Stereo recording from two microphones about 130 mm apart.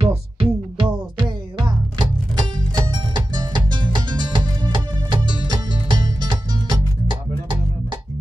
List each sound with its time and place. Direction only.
0.0 s music: 45° right (ahead or behind)